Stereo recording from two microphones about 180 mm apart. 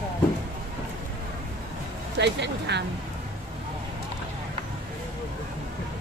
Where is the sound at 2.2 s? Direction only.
70° right (ahead or behind).